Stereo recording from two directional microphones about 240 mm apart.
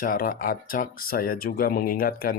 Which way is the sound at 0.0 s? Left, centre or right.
Left.